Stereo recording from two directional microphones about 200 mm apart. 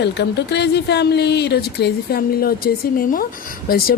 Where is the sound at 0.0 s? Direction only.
60° left (ahead or behind).